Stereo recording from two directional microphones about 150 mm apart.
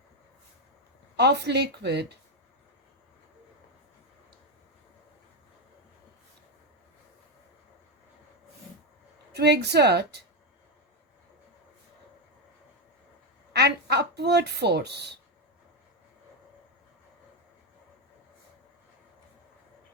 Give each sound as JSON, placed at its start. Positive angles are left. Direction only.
{"t": 1.1, "sound": "speech", "side_deg": -90}
{"t": 9.3, "sound": "speech", "side_deg": -90}
{"t": 13.5, "sound": "speech", "side_deg": -90}